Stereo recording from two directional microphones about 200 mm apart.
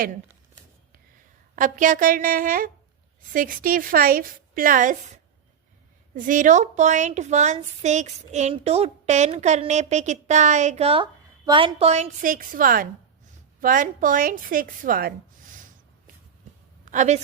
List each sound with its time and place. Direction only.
1.5 s a woman's voice: 40° right (ahead or behind)
16.8 s a woman's voice: 40° right (ahead or behind)